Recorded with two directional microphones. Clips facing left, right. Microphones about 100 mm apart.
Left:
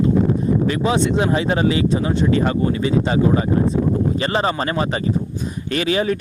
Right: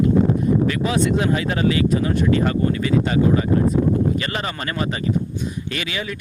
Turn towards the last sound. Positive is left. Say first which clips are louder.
# left 9 dB
turn(degrees=40)  # may be behind; listen again after turning